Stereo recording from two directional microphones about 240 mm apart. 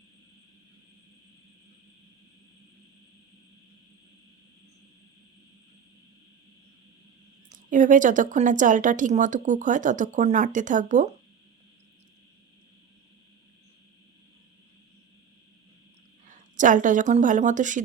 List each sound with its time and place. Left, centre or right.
7.5 s a woman's voice: right
16.3 s speech: right